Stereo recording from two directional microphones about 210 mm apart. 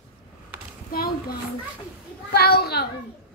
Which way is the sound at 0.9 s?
45° left (ahead or behind).